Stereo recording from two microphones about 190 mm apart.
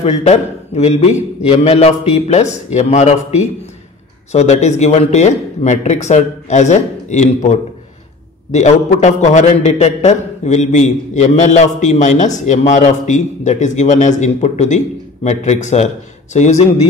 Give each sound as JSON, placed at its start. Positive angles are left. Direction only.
{"t": 0.0, "sound": "a man's voice", "side_deg": 35}